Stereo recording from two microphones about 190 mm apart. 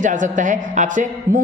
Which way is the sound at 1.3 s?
45° right (ahead or behind).